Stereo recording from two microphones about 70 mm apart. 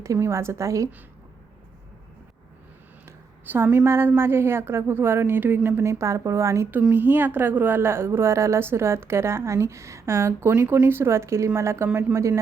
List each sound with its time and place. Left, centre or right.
0.0 s a woman's voice: right
3.5 s a woman's voice: right
6.9 s a woman's voice: right